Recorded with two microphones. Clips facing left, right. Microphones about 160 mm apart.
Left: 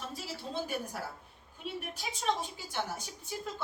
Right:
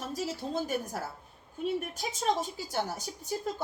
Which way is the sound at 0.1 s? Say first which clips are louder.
Right 6 dB; 40° right (ahead or behind).